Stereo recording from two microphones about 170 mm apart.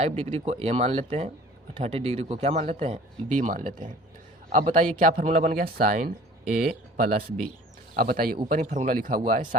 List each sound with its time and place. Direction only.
0.0 s speech: 40° right (ahead or behind)